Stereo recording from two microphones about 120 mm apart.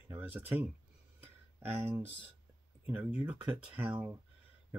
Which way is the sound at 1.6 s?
15° right (ahead or behind).